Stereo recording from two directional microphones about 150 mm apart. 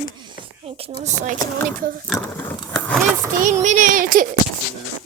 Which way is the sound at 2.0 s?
10° left (ahead or behind).